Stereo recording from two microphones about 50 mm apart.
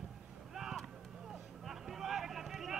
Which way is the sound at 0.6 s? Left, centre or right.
Centre.